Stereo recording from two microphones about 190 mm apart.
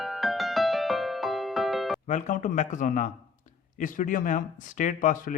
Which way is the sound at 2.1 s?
40° left (ahead or behind).